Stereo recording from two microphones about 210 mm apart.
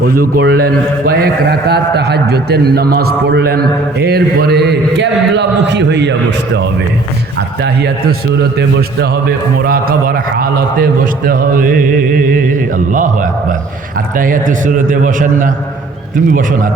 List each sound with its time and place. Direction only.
0.0 s a man's voice: 45° right (ahead or behind)
9.6 s a man's voice: 45° right (ahead or behind)
11.3 s mantra: 40° right (ahead or behind)
14.2 s mantra: 40° right (ahead or behind)